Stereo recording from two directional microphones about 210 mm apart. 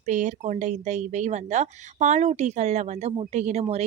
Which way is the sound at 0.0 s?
35° right (ahead or behind).